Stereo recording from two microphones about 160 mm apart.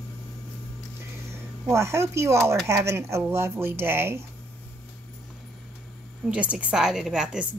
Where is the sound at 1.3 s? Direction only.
15° right (ahead or behind).